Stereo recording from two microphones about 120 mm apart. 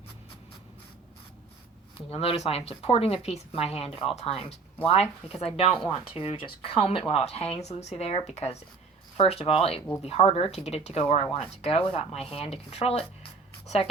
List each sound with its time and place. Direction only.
2.0 s speech: 55° left (ahead or behind)